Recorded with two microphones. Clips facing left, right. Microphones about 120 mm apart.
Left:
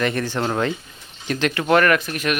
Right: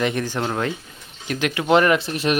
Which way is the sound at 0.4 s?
Centre (ahead or behind).